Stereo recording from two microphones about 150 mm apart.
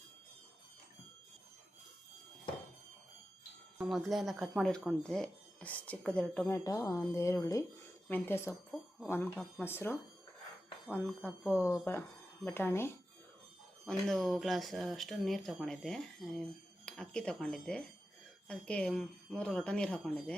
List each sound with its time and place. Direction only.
3.8 s speech: centre (ahead or behind); by 12.9 s 15° left (ahead or behind)
13.8 s speech: centre (ahead or behind)